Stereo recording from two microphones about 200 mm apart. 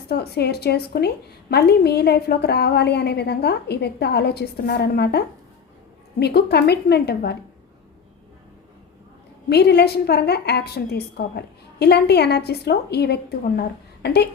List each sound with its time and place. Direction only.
0.1 s a woman's voice: 55° left (ahead or behind)
9.5 s a woman's voice: 55° left (ahead or behind)